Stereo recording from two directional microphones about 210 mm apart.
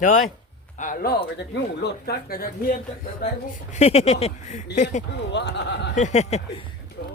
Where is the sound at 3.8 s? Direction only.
30° left (ahead or behind).